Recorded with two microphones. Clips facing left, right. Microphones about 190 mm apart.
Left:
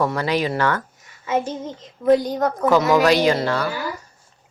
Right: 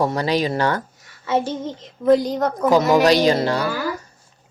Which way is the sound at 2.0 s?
40° right (ahead or behind).